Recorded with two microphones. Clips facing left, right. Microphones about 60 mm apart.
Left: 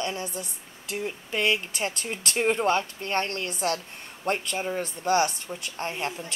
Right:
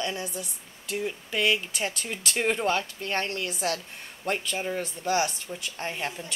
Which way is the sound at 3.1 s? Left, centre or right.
Centre.